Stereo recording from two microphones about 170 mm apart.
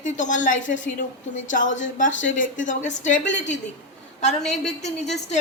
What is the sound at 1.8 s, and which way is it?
A woman's voice, 50° left (ahead or behind).